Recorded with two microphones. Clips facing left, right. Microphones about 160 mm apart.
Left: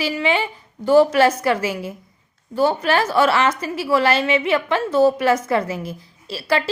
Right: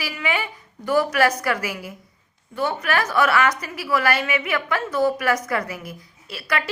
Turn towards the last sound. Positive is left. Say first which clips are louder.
# left 6 dB
turn(degrees=30)  # may be behind; listen again after turning